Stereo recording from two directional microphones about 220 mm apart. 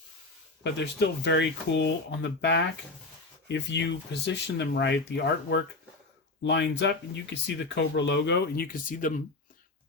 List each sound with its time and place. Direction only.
0.6 s speech: 50° left (ahead or behind)